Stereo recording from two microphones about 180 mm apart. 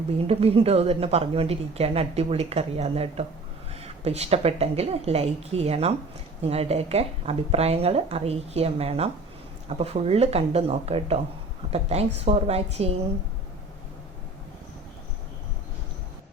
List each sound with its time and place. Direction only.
0.3 s a woman's voice: 35° right (ahead or behind)